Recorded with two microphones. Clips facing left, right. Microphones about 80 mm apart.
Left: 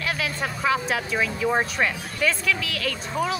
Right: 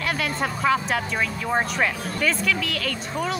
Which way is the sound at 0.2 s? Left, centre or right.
Centre.